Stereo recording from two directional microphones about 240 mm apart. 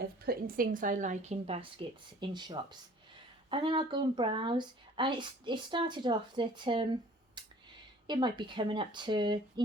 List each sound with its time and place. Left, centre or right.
0.0 s a woman's voice: right; by 6.8 s centre
7.4 s a sound: centre
8.0 s speech: centre